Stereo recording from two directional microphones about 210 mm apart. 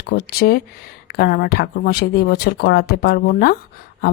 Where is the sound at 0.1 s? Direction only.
45° left (ahead or behind).